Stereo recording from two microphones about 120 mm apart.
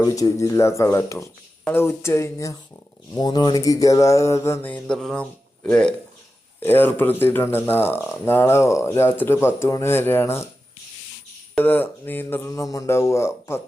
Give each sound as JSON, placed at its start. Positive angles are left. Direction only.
{"t": 0.0, "sound": "speech", "side_deg": 30}
{"t": 3.2, "sound": "speech", "side_deg": 35}
{"t": 4.7, "sound": "speech", "side_deg": 5}
{"t": 11.5, "sound": "speech", "side_deg": 15}